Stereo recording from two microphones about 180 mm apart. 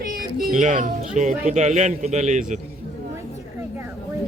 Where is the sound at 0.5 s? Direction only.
45° right (ahead or behind).